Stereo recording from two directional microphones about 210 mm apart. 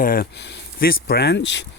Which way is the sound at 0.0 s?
45° left (ahead or behind).